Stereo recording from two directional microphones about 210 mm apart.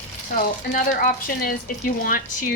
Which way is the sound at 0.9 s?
45° left (ahead or behind).